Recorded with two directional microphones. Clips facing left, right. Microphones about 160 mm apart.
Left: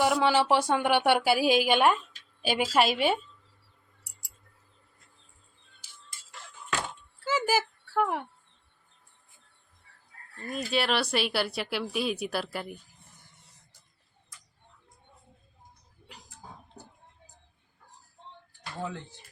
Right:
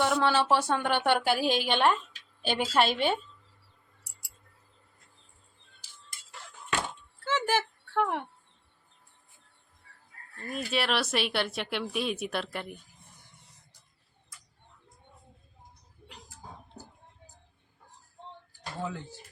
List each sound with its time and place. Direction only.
0.0 s a woman's voice: 10° left (ahead or behind)
7.3 s a sound: 10° left (ahead or behind)
10.4 s speech: centre (ahead or behind)
18.8 s speech: 5° right (ahead or behind)